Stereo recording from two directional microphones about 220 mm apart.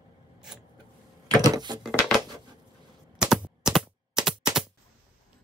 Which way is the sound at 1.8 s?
Centre (ahead or behind).